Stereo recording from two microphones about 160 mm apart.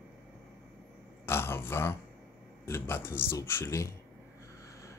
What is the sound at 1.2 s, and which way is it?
A man's voice, 15° left (ahead or behind).